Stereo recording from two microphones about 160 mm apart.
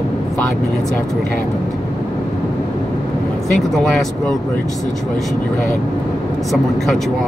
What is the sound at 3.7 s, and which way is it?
Speech, 5° left (ahead or behind).